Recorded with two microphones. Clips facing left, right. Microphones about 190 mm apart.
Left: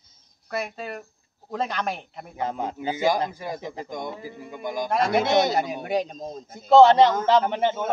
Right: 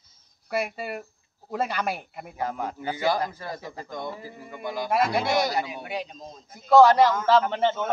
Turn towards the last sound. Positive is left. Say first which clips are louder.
# left 1 dB
turn(degrees=10)  # may be behind; listen again after turning